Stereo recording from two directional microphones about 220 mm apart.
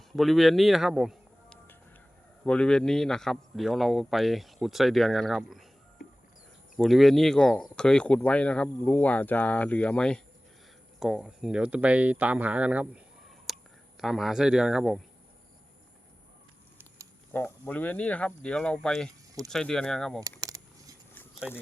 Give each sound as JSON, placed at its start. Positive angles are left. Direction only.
{"t": 0.1, "sound": "speech", "side_deg": 0}
{"t": 6.0, "sound": "a sound", "side_deg": 40}
{"t": 6.7, "sound": "speech", "side_deg": 0}
{"t": 17.3, "sound": "speech", "side_deg": 10}
{"t": 20.2, "sound": "keys jangling", "side_deg": -15}
{"t": 21.4, "sound": "speech", "side_deg": 0}